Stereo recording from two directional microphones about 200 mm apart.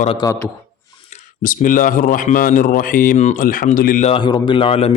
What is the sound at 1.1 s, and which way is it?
Speech, 40° left (ahead or behind).